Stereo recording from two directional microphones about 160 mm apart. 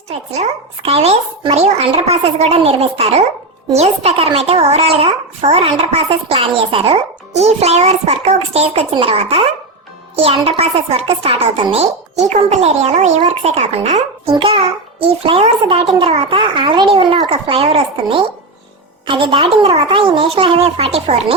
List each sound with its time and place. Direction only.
0.1 s a child's voice: 40° right (ahead or behind)